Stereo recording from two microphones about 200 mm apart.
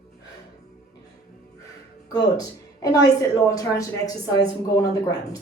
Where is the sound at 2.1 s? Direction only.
20° left (ahead or behind).